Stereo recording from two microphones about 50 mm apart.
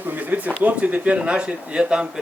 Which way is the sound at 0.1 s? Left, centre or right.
Right.